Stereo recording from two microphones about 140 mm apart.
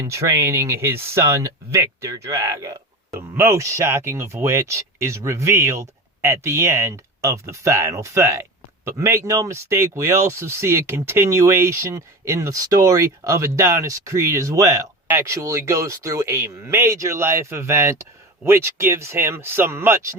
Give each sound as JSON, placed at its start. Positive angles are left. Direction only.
{"t": 0.0, "sound": "speech", "side_deg": -20}